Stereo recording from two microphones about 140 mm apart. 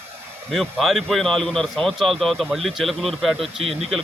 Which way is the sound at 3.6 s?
45° right (ahead or behind).